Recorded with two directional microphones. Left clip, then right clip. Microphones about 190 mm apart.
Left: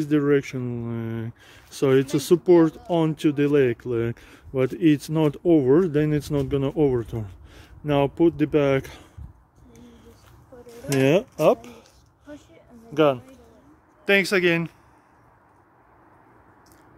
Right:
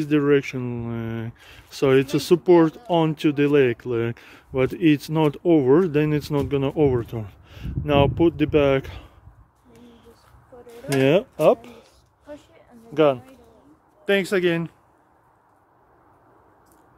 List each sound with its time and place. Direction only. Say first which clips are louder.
0.0 s speech: right 2 dB; centre (ahead or behind)
10.8 s speech: right 1 dB; centre (ahead or behind)
12.9 s speech: right 1 dB; centre (ahead or behind)